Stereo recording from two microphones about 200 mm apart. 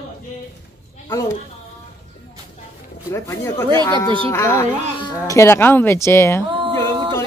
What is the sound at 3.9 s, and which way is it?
Speech, 25° right (ahead or behind).